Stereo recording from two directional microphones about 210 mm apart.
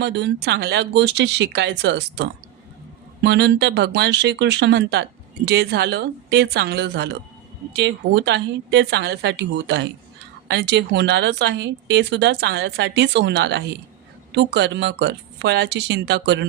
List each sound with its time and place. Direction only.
0.0 s speech: 55° right (ahead or behind)